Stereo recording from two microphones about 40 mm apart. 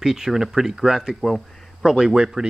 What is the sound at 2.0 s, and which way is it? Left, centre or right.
Speech, centre.